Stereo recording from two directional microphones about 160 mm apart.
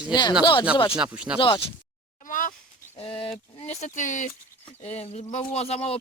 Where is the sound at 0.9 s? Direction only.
5° right (ahead or behind).